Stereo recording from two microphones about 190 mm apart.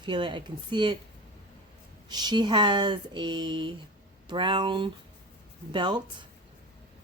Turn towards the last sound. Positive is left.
turn(degrees=-25)  # may be behind; listen again after turning